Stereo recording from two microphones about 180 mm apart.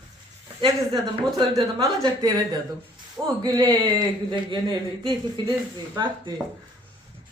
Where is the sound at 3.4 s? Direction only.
25° right (ahead or behind).